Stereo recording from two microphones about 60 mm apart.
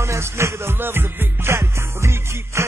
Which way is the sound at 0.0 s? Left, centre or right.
Right.